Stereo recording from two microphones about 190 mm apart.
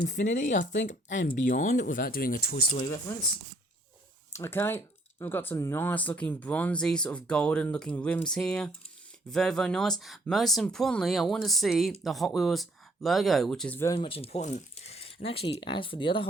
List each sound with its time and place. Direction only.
0.0 s speech: 40° left (ahead or behind)
4.3 s speech: 15° left (ahead or behind)
14.0 s speech: 30° left (ahead or behind)